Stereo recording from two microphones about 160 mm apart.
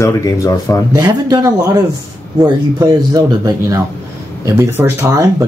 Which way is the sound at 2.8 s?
25° right (ahead or behind).